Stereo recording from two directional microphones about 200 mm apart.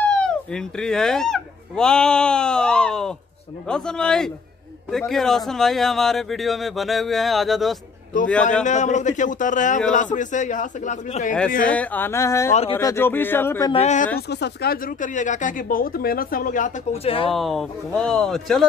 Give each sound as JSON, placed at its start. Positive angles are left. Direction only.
{"t": 0.0, "sound": "speech", "side_deg": 5}
{"t": 8.6, "sound": "a man's voice", "side_deg": 35}
{"t": 11.7, "sound": "speech", "side_deg": 5}
{"t": 13.7, "sound": "a man's voice", "side_deg": 30}
{"t": 14.3, "sound": "speech", "side_deg": 55}
{"t": 17.3, "sound": "speech", "side_deg": 0}